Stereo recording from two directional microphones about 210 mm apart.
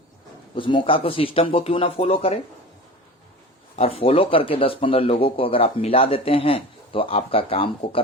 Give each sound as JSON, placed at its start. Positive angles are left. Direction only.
{"t": 0.5, "sound": "speech", "side_deg": 25}
{"t": 3.8, "sound": "speech", "side_deg": 30}